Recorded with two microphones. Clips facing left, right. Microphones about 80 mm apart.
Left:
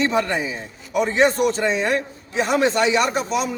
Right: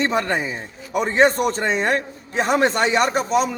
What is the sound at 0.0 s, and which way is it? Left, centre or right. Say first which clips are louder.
Speech: even; right.